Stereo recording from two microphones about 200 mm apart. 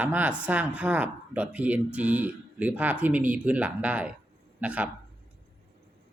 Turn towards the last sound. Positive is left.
turn(degrees=-5)  # may be behind; listen again after turning